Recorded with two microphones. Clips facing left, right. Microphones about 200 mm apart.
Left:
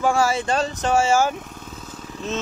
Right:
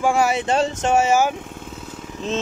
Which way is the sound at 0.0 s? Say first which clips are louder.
Right 1 dB; 15° right (ahead or behind).